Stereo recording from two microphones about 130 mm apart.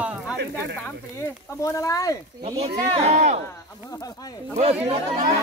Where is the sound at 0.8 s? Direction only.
20° left (ahead or behind).